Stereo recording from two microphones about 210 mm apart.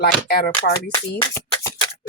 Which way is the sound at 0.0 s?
45° left (ahead or behind).